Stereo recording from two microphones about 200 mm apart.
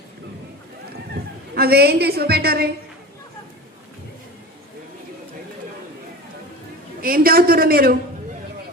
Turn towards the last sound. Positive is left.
turn(degrees=-50)  # may be behind; listen again after turning